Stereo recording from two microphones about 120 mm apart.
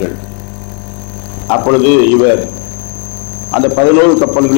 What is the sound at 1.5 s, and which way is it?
Speech, 20° left (ahead or behind).